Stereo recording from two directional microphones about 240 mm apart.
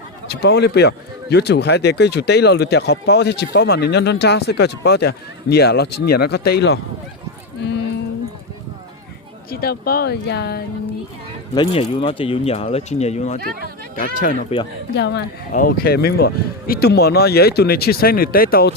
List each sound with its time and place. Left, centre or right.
0.4 s speech: left
9.5 s speech: left
11.5 s speech: left
14.9 s speech: left